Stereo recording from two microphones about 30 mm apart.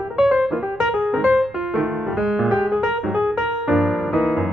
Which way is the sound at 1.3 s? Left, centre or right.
Centre.